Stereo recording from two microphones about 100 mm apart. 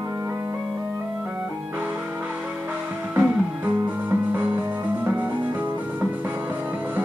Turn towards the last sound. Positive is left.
turn(degrees=-15)  # may be behind; listen again after turning